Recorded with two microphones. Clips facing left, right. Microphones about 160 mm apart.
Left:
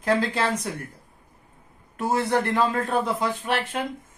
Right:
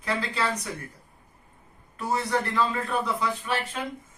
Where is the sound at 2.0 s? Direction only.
45° left (ahead or behind).